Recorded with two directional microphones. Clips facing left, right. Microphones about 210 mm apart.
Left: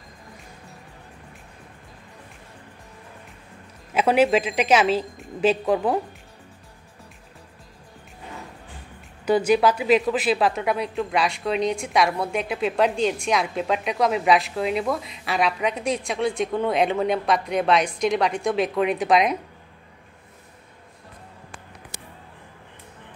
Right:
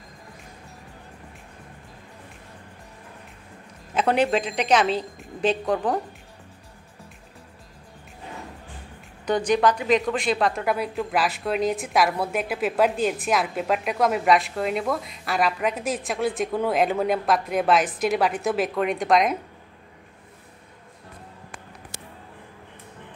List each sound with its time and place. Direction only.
3.9 s a woman's voice: 5° left (ahead or behind)
9.2 s speech: 5° left (ahead or behind)
21.9 s a sound: 15° left (ahead or behind)